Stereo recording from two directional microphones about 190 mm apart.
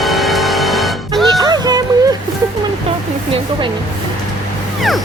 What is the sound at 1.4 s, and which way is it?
Music, 20° right (ahead or behind).